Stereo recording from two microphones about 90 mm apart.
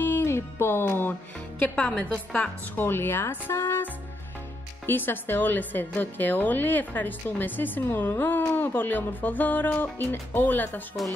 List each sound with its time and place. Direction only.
0.0 s music: 25° left (ahead or behind)
1.8 s a woman's voice: 15° left (ahead or behind)